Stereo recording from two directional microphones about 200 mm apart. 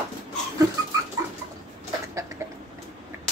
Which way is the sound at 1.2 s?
15° right (ahead or behind).